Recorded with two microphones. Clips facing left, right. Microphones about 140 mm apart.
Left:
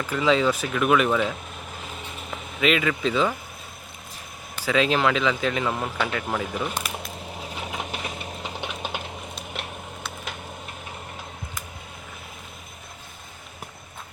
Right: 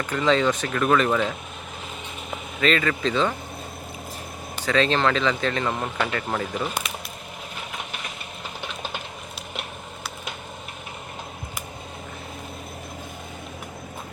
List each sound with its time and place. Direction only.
0.0 s speech: 5° left (ahead or behind)
2.6 s speech: 5° left (ahead or behind)
4.6 s speech: 5° left (ahead or behind)
8.6 s typing: 15° left (ahead or behind)